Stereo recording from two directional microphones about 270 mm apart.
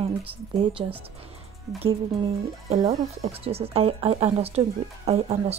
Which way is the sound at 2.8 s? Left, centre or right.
Centre.